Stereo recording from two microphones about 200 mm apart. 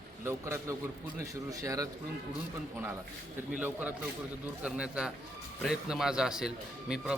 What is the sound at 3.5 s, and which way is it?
Speech, 10° right (ahead or behind).